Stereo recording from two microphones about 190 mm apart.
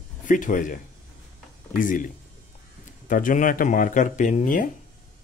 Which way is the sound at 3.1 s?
45° left (ahead or behind).